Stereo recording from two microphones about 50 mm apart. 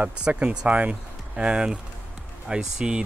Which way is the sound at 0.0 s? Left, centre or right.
Right.